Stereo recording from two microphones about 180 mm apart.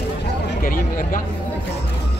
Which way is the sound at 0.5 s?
50° left (ahead or behind).